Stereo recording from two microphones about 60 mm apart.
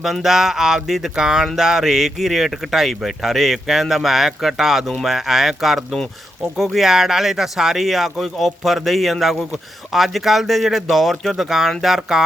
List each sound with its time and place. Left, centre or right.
0.0 s speech: centre